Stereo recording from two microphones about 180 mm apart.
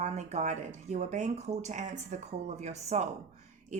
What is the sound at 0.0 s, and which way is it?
A woman's voice, 40° right (ahead or behind).